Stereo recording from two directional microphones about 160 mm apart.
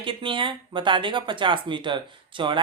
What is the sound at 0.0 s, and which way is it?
Speech, 30° right (ahead or behind).